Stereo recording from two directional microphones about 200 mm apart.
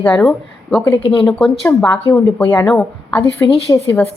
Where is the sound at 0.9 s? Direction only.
25° left (ahead or behind).